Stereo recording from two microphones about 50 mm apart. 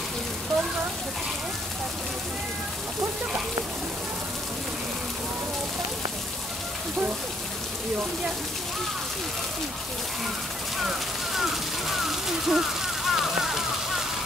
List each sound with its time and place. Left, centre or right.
11.3 s speech: centre